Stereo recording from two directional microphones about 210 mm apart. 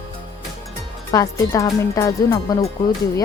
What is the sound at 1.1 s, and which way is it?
Speech, 15° left (ahead or behind).